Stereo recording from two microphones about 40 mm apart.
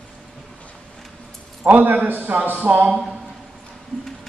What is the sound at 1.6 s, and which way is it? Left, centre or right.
A man's voice, right.